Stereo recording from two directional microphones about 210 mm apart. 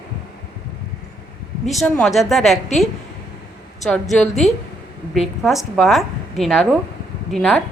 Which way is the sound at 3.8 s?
Centre (ahead or behind).